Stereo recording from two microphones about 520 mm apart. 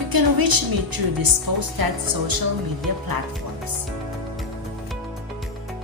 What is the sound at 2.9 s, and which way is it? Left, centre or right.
Speech, right.